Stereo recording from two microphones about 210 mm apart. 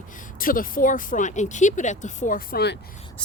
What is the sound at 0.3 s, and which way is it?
Speech, 40° left (ahead or behind).